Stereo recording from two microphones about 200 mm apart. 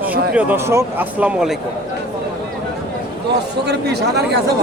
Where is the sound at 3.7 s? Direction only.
55° right (ahead or behind).